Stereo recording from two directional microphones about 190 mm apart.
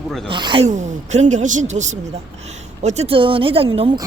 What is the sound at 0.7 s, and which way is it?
A woman's voice, 40° right (ahead or behind).